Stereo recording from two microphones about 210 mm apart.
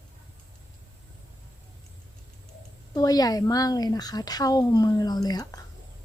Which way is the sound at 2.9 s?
15° left (ahead or behind).